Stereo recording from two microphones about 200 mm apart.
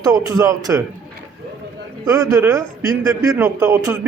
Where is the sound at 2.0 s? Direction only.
15° right (ahead or behind).